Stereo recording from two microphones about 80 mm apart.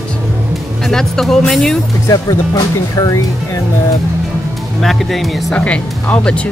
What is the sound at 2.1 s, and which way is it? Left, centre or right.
Speech, left.